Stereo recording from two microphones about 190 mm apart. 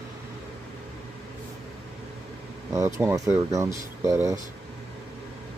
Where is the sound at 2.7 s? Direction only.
15° right (ahead or behind).